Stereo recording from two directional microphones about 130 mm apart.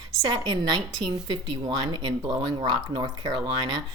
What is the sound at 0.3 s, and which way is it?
Speech, 35° right (ahead or behind).